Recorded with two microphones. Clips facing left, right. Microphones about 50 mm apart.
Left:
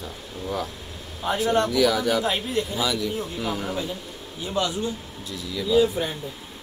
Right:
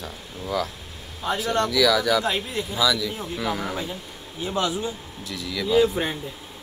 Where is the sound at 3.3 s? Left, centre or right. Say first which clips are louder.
Right 1 dB; right.